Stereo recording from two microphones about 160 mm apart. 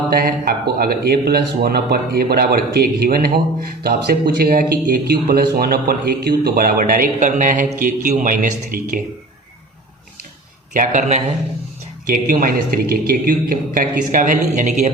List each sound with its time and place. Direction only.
0.1 s a man's voice: 70° right (ahead or behind)
10.8 s a man's voice: 50° right (ahead or behind)